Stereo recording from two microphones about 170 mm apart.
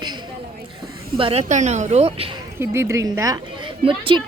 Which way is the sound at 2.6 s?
15° right (ahead or behind).